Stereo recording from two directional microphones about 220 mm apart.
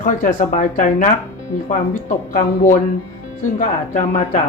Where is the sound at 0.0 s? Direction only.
35° left (ahead or behind).